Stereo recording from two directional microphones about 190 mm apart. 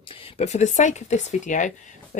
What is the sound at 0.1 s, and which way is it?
Speech, 30° left (ahead or behind).